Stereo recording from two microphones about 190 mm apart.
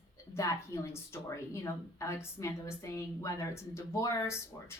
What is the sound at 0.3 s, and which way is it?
A woman's voice, 15° left (ahead or behind).